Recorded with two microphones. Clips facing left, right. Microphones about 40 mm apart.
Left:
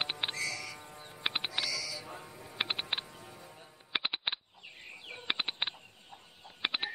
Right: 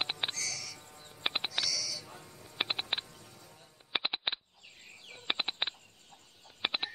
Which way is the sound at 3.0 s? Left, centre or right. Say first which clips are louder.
Left 4 dB; left.